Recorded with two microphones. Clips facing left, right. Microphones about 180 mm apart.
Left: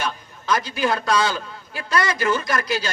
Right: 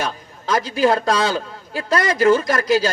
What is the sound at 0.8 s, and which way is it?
Speech, 35° right (ahead or behind).